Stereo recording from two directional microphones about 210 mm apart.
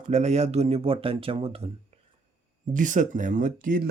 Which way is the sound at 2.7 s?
40° right (ahead or behind).